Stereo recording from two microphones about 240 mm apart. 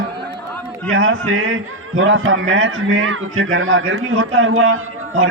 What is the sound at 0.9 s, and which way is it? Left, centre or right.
A man's voice, right.